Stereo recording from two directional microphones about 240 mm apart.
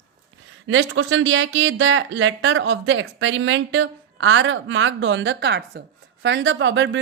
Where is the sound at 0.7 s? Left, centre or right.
Right.